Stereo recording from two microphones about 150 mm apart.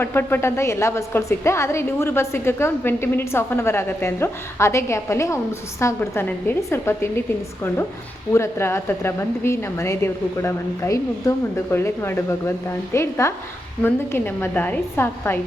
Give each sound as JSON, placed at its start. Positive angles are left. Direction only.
{"t": 0.0, "sound": "a woman's voice", "side_deg": 15}
{"t": 8.3, "sound": "a woman's voice", "side_deg": 15}